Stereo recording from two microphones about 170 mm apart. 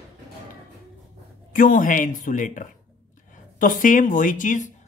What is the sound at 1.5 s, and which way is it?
Speech, 55° left (ahead or behind).